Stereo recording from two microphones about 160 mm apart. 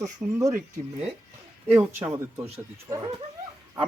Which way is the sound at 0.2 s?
10° right (ahead or behind).